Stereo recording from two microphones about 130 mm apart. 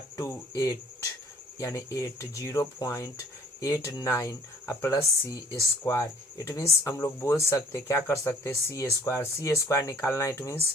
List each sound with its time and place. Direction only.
0.2 s speech: 25° left (ahead or behind)